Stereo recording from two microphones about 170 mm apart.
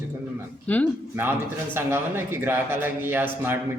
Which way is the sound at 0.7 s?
10° left (ahead or behind).